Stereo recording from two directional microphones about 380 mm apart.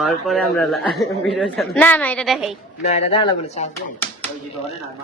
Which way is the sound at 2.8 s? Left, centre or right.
Centre.